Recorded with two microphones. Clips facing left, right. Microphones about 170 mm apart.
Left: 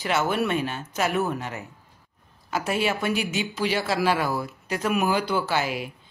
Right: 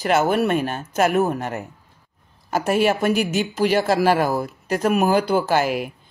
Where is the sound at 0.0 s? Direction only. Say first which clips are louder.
Right 6 dB; 45° right (ahead or behind).